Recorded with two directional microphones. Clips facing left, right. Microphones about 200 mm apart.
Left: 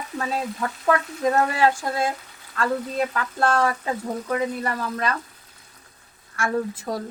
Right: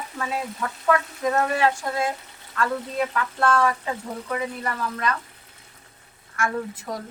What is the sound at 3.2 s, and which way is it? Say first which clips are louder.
Frying: right 1 dB; 35° left (ahead or behind).